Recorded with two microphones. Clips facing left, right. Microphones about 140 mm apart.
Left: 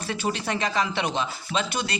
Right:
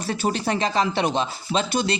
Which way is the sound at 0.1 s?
40° right (ahead or behind).